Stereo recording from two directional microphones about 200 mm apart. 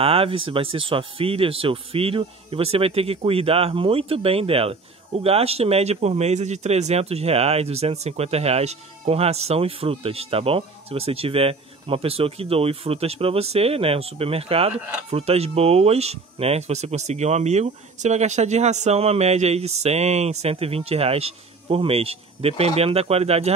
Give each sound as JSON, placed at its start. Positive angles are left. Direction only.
{"t": 0.0, "sound": "speech", "side_deg": -30}